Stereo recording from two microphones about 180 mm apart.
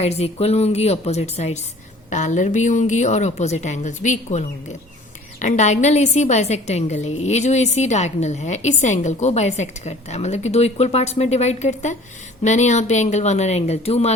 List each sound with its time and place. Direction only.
0.0 s a woman's voice: 35° left (ahead or behind)